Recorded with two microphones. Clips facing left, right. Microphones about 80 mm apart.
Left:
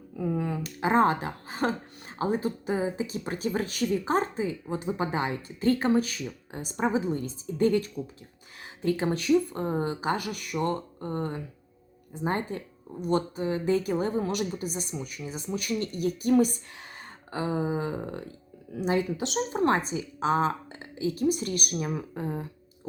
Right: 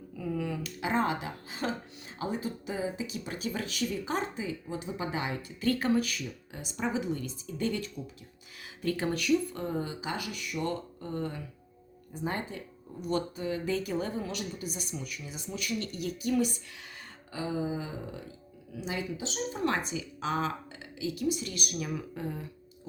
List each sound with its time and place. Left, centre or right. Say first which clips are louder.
0.2 s speech: left 4 dB; left
8.8 s speech: left 4 dB; left
10.6 s speech: left 5 dB; left
17.3 s a sound: left 4 dB; left
19.6 s speech: left 5 dB; left
21.8 s speech: left 4 dB; left